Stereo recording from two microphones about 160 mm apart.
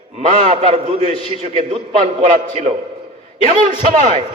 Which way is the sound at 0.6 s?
40° right (ahead or behind).